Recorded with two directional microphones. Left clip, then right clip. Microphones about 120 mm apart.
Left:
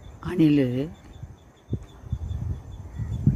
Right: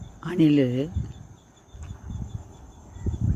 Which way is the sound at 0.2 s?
10° right (ahead or behind).